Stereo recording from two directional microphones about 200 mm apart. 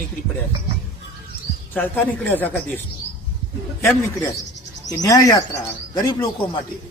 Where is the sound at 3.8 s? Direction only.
15° left (ahead or behind).